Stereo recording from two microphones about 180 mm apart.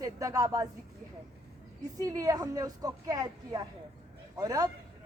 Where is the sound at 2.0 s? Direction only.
20° right (ahead or behind).